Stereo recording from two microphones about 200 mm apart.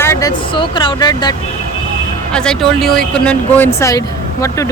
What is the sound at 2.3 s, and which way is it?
Speech, 5° left (ahead or behind).